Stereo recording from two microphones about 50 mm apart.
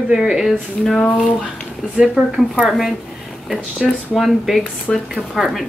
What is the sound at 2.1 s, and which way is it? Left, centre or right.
Speech, centre.